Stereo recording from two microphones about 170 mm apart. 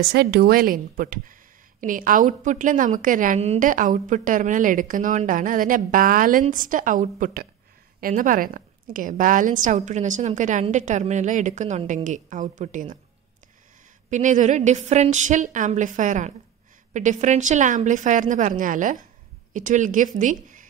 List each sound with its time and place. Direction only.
0.1 s a woman's voice: 70° right (ahead or behind); by 12.8 s 45° right (ahead or behind)
14.1 s a woman's voice: 45° right (ahead or behind)